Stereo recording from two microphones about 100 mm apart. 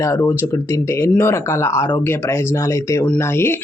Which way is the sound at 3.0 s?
20° left (ahead or behind).